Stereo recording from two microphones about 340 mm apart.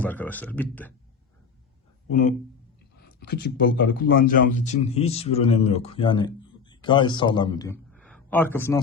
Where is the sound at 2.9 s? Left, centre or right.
Left.